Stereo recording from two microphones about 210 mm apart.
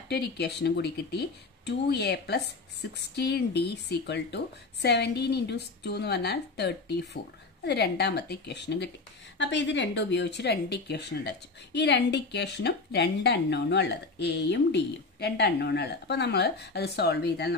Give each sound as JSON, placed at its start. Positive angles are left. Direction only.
{"t": 0.1, "sound": "speech", "side_deg": 50}